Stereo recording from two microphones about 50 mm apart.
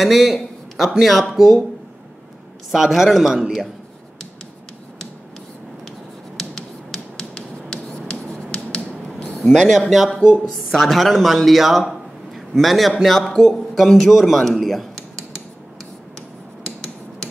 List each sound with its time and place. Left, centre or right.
0.0 s speech: centre
2.7 s a man's voice: centre
5.9 s finger snapping: centre
9.3 s a man's voice: centre
10.1 s speech: right
10.7 s a man's voice: centre
16.2 s a sound: centre